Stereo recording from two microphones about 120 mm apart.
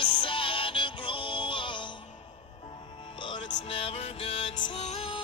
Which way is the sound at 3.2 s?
40° left (ahead or behind).